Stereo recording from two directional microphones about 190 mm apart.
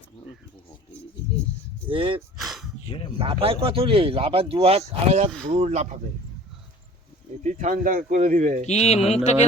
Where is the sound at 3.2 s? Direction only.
30° right (ahead or behind).